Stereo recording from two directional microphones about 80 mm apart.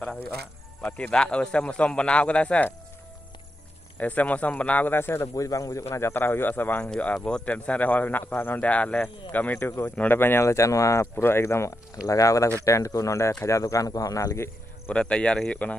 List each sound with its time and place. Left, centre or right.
0.8 s a man's voice: centre
4.0 s speech: centre
5.3 s a man's voice: left
14.9 s a man's voice: centre